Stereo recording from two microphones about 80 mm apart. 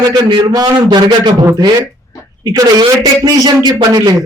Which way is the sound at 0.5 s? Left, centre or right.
Right.